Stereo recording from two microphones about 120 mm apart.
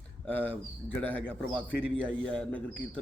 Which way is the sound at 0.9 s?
15° left (ahead or behind).